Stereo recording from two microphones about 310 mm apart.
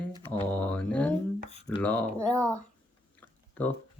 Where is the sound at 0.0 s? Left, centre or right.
Centre.